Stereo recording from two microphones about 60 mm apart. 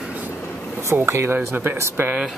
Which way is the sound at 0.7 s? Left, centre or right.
Right.